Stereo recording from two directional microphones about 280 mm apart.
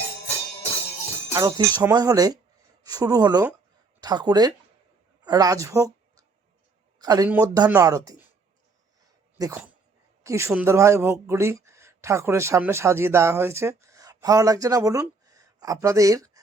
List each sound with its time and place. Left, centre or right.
1.3 s speech: centre
7.0 s speech: centre
9.4 s speech: centre